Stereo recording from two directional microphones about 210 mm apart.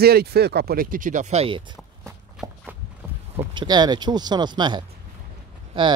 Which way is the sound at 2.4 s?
15° right (ahead or behind).